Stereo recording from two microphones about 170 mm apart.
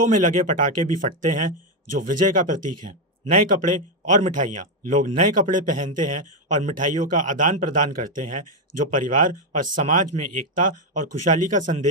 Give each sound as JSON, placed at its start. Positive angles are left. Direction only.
{"t": 0.0, "sound": "speech", "side_deg": -50}